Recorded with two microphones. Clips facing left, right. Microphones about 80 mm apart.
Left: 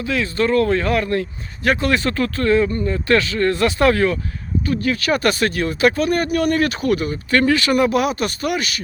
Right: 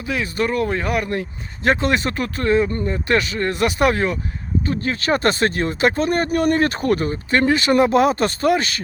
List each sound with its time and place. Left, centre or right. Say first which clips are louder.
0.0 s speech: left 2 dB; centre; by 7.2 s right
7.3 s speech: left 1 dB; right